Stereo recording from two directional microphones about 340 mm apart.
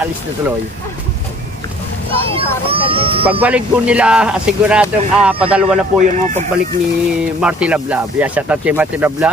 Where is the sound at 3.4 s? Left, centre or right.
Centre.